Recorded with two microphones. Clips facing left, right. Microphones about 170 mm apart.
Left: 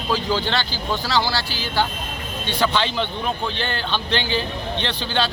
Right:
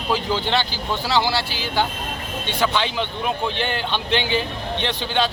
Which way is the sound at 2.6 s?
10° right (ahead or behind).